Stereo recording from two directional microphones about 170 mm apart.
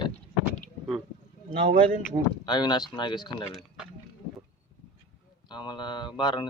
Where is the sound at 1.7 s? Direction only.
55° right (ahead or behind).